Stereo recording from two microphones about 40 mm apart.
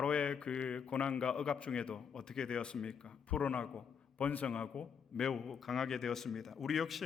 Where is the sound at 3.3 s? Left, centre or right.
Left.